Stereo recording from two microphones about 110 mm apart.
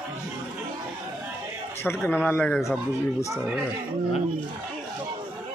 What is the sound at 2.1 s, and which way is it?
Speech, 15° left (ahead or behind).